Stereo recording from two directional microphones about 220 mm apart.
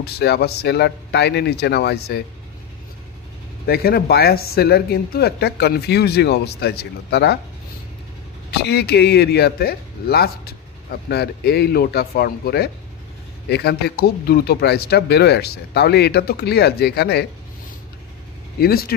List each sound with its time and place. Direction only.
0.0 s speech: 45° left (ahead or behind)
3.6 s speech: 45° left (ahead or behind)
8.5 s speech: 50° left (ahead or behind)
18.6 s speech: 45° left (ahead or behind)